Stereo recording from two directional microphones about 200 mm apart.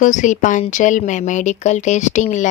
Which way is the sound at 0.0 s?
40° left (ahead or behind).